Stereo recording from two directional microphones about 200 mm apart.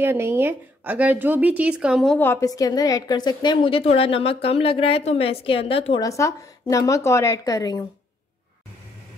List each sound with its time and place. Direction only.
0.0 s speech: 10° right (ahead or behind)
2.1 s a woman's voice: 10° left (ahead or behind); by 6.0 s 30° left (ahead or behind)
6.0 s a woman's voice: 15° left (ahead or behind)